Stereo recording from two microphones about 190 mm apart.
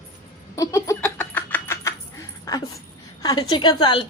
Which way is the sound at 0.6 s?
15° left (ahead or behind).